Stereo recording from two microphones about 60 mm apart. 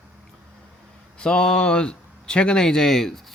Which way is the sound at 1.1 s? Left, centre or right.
Centre.